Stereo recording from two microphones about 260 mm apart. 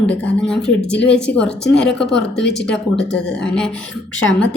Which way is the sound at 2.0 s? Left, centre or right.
Left.